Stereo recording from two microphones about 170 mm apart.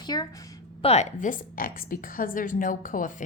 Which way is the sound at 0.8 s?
40° left (ahead or behind).